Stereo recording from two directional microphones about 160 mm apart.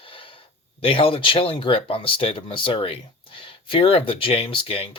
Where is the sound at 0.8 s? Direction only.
35° left (ahead or behind).